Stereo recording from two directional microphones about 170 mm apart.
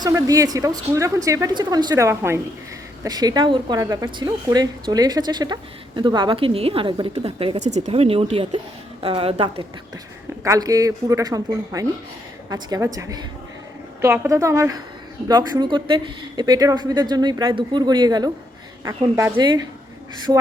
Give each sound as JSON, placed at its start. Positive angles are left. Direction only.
{"t": 0.0, "sound": "a woman's voice", "side_deg": -20}
{"t": 10.4, "sound": "a woman's voice", "side_deg": -20}